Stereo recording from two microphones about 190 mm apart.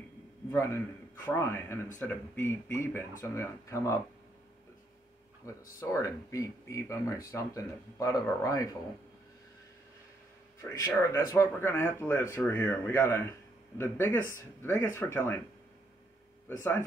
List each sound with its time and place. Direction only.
0.5 s speech: 15° left (ahead or behind)
5.4 s speech: 15° left (ahead or behind)
10.6 s speech: 15° left (ahead or behind)
16.4 s speech: 10° left (ahead or behind)